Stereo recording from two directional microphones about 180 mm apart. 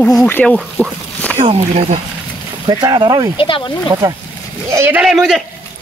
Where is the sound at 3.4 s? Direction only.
30° left (ahead or behind).